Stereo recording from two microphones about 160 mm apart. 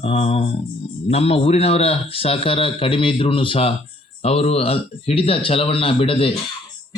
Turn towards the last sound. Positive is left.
turn(degrees=35)  # may be behind; listen again after turning